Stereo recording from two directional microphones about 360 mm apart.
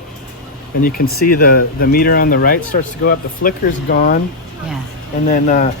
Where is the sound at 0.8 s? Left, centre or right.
Left.